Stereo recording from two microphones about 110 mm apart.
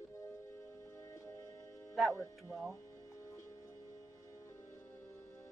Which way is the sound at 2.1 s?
25° left (ahead or behind).